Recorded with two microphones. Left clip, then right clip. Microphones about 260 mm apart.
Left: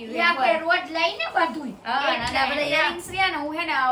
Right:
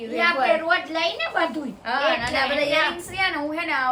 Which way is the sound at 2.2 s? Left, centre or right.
Centre.